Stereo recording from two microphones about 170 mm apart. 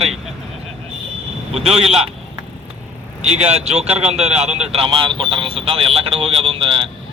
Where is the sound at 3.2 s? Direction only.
40° right (ahead or behind).